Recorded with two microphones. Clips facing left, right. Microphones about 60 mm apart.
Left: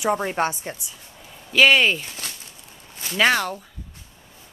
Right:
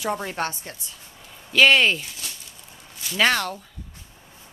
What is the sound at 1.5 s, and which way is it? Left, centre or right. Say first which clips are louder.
Speech: left 1 dB; centre.